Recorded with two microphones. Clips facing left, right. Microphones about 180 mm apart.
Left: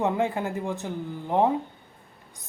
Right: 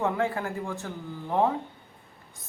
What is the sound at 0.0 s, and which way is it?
Speech, 20° left (ahead or behind).